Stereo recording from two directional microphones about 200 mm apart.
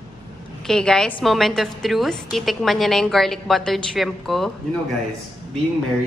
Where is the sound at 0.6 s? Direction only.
5° left (ahead or behind).